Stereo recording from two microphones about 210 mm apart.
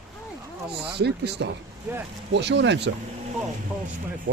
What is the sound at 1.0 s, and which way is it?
Speech, 55° right (ahead or behind).